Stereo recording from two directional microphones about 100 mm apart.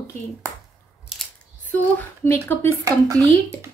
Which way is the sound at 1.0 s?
5° right (ahead or behind).